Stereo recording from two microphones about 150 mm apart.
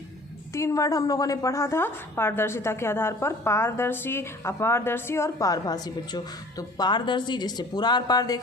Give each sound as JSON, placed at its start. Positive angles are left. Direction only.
{"t": 0.5, "sound": "a woman's voice", "side_deg": 20}